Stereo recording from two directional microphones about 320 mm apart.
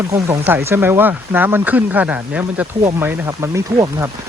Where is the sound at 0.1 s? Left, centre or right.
Centre.